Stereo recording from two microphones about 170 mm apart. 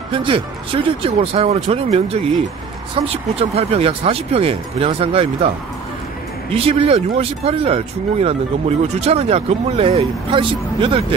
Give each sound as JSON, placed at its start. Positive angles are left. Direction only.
{"t": 0.1, "sound": "speech", "side_deg": -30}
{"t": 6.5, "sound": "speech", "side_deg": -35}